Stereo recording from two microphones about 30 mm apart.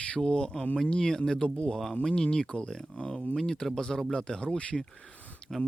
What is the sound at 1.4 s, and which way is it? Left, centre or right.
Speech, left.